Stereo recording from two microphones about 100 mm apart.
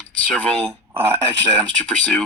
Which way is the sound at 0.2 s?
15° left (ahead or behind).